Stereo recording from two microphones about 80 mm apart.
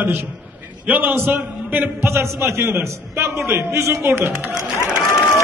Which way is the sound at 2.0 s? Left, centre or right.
Right.